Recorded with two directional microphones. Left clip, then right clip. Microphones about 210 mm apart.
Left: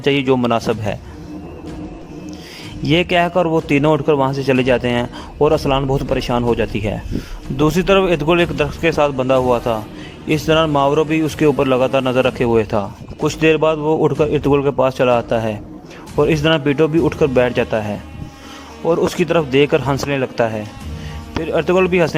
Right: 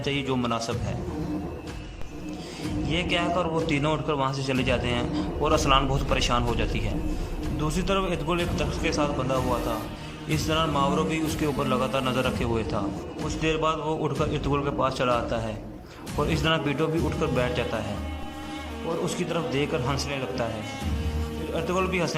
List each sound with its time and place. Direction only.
0.0 s a man's voice: 40° left (ahead or behind)
2.9 s a man's voice: 40° left (ahead or behind)
18.9 s a man's voice: 45° left (ahead or behind)
21.5 s a man's voice: 45° left (ahead or behind)